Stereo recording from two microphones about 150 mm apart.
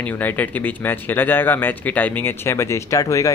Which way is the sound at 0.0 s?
10° left (ahead or behind).